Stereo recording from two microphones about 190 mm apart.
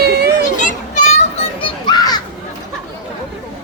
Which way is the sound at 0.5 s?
40° left (ahead or behind).